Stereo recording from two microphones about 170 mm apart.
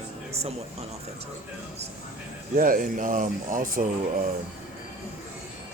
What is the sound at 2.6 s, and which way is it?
Speech, 55° right (ahead or behind).